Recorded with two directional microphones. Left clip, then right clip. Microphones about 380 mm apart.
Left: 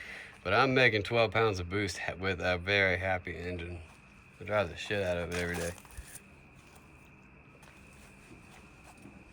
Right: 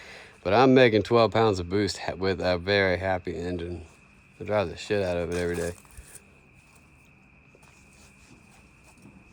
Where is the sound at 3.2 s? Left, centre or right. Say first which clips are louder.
Right 7 dB; right.